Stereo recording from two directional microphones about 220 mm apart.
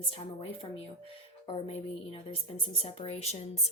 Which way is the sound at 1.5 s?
25° left (ahead or behind).